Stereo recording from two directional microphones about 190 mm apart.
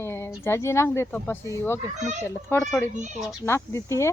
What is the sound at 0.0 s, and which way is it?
Speech, 10° left (ahead or behind).